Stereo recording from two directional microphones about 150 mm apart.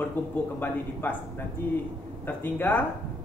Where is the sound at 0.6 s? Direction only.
15° left (ahead or behind).